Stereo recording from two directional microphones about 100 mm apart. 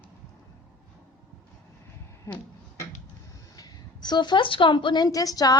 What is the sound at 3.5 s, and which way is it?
A woman's voice, 40° left (ahead or behind).